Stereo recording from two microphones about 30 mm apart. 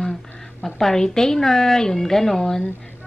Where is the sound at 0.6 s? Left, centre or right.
Centre.